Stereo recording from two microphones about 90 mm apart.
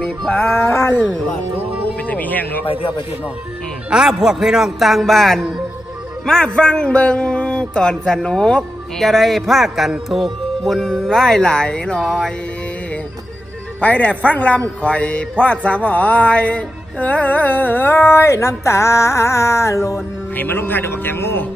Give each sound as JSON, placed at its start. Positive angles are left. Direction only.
{"t": 0.7, "sound": "speech", "side_deg": 30}
{"t": 2.0, "sound": "speech", "side_deg": 15}
{"t": 2.6, "sound": "a man's voice", "side_deg": 90}
{"t": 3.9, "sound": "speech", "side_deg": -5}
{"t": 13.7, "sound": "speech", "side_deg": 15}
{"t": 14.8, "sound": "music", "side_deg": 15}
{"t": 20.3, "sound": "music", "side_deg": 25}